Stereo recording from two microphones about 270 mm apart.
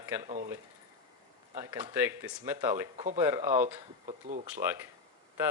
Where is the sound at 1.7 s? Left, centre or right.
Centre.